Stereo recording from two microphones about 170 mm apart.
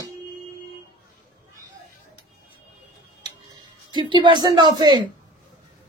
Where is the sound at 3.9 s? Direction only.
25° right (ahead or behind).